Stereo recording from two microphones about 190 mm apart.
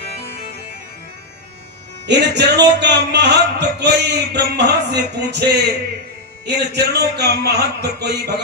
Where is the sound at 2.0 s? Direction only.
65° right (ahead or behind).